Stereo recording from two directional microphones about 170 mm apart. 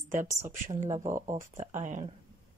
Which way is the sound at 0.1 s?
45° right (ahead or behind).